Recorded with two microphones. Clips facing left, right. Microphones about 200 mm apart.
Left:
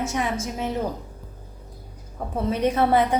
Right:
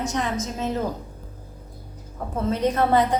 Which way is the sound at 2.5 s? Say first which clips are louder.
Even; 10° left (ahead or behind).